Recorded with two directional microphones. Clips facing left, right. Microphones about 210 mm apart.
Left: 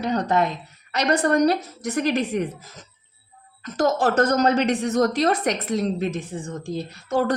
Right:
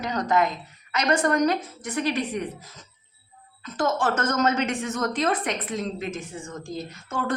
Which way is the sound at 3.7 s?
40° left (ahead or behind).